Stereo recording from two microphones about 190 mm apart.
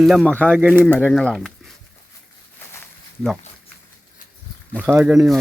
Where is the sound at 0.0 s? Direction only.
Centre (ahead or behind).